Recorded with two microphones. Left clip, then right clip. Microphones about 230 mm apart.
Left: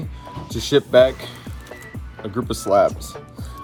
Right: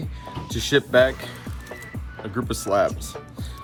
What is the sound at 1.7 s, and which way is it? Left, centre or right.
Music, left.